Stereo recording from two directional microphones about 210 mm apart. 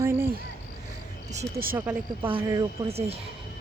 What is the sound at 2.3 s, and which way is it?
Speech, 20° right (ahead or behind).